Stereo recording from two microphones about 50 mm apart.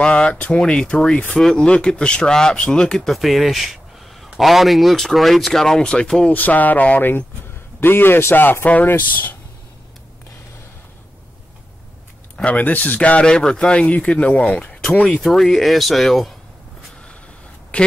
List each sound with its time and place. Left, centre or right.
0.0 s a man's voice: left
1.3 s speech: centre
3.1 s a sound: centre
4.4 s speech: centre
6.3 s a sound: left
7.8 s a man's voice: left
8.8 s a sound: left
12.4 s a man's voice: left; by 16.3 s centre
17.7 s speech: left